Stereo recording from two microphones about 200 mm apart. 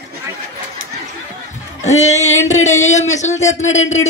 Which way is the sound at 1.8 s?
35° left (ahead or behind).